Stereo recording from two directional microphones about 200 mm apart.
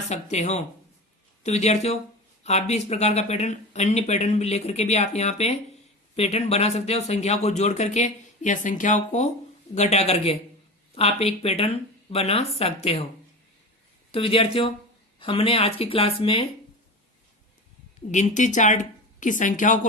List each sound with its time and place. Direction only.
0.1 s speech: 35° left (ahead or behind)
14.1 s speech: 30° left (ahead or behind)
18.1 s speech: 40° left (ahead or behind)